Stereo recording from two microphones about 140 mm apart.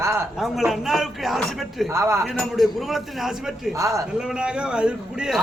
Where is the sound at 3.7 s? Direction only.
20° right (ahead or behind).